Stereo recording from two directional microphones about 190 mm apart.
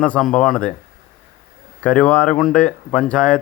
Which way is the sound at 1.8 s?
5° left (ahead or behind).